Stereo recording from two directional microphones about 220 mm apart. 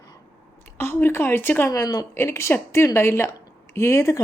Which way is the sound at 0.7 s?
10° left (ahead or behind).